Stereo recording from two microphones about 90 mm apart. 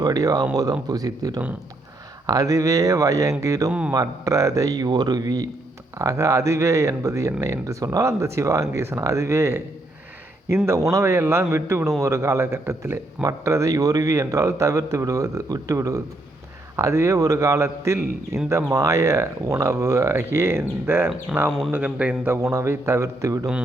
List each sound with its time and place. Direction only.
0.0 s a man's voice: 40° right (ahead or behind)
3.7 s a man's voice: 15° right (ahead or behind)
3.9 s a man's voice: 40° right (ahead or behind)
10.9 s a man's voice: 30° right (ahead or behind)
21.3 s speech: centre (ahead or behind)
21.7 s speech: 20° right (ahead or behind)
22.4 s a man's voice: 35° right (ahead or behind)